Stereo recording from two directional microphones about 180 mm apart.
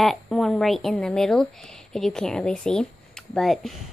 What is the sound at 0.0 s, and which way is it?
Speech, centre (ahead or behind).